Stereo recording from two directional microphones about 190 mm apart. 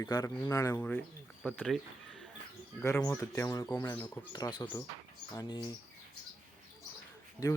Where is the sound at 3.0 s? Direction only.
15° left (ahead or behind).